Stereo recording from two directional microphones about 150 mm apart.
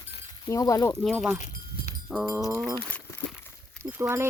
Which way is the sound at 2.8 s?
10° left (ahead or behind).